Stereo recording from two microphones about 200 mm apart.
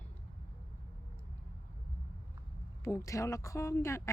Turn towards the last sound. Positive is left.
turn(degrees=15)  # may be behind; listen again after turning